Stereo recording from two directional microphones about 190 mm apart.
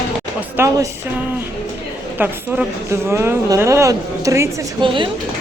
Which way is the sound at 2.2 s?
10° right (ahead or behind).